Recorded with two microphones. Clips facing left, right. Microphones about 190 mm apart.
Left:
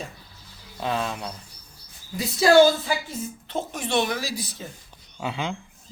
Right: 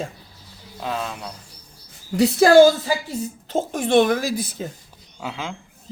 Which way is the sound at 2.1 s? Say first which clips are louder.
Right 9 dB; 70° right (ahead or behind).